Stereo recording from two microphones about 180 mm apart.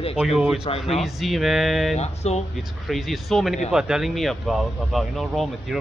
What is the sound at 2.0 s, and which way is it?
Speech, 35° left (ahead or behind).